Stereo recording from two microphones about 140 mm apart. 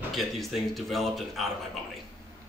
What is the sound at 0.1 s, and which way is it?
Speech, centre (ahead or behind).